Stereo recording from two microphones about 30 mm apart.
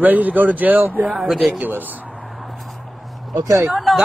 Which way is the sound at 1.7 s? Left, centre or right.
Right.